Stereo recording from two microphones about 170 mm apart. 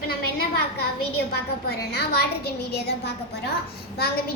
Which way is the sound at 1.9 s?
70° left (ahead or behind).